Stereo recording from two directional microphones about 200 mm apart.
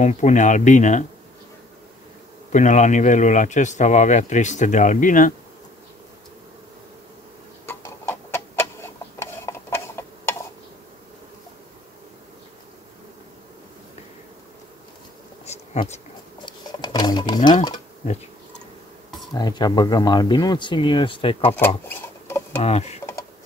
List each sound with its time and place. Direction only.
0.0 s speech: 40° left (ahead or behind)
2.5 s speech: 35° left (ahead or behind)
7.6 s tick-tock: 15° left (ahead or behind)
15.4 s a sound: 35° left (ahead or behind)
16.4 s a sound: 20° left (ahead or behind)
19.3 s speech: 20° left (ahead or behind)
21.5 s rodents: 10° left (ahead or behind)
22.6 s speech: 30° left (ahead or behind)